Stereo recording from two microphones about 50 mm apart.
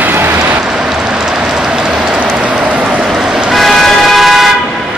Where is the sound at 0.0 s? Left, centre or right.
Right.